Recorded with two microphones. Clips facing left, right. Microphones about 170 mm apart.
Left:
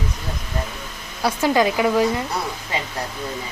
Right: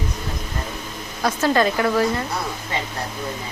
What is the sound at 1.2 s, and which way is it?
Speech, 15° left (ahead or behind).